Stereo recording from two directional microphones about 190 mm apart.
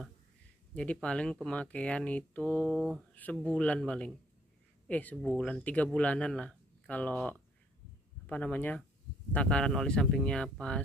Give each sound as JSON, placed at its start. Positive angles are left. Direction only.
{"t": 0.7, "sound": "speech", "side_deg": 5}